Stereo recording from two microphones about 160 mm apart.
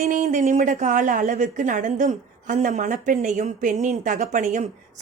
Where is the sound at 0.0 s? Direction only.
50° right (ahead or behind).